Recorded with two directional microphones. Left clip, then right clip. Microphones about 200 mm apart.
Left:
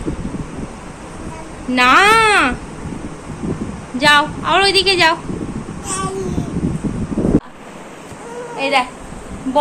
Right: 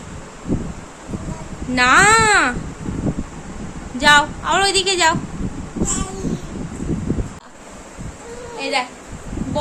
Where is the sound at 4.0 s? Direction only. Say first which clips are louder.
Left 1 dB; 5° right (ahead or behind).